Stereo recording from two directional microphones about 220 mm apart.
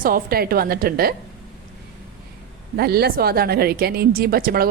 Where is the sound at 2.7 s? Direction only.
45° right (ahead or behind).